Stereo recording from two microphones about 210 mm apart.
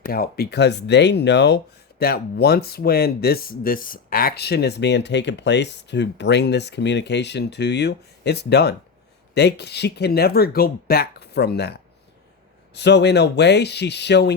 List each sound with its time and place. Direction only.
0.0 s speech: 45° left (ahead or behind)